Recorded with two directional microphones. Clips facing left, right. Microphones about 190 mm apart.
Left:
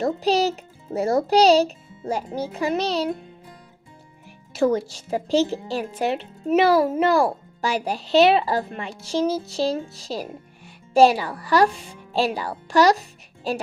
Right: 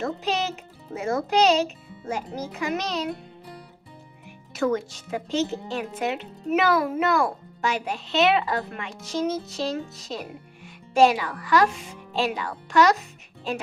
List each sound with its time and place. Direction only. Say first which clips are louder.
0.0 s a child's voice: left 6 dB; 35° left (ahead or behind)
4.5 s a woman's voice: left 4 dB; 30° left (ahead or behind)